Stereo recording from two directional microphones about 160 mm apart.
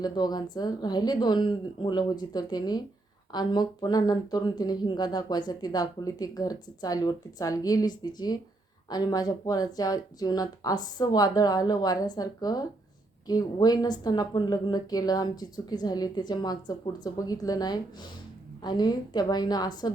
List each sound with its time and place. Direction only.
0.0 s speech: 25° left (ahead or behind)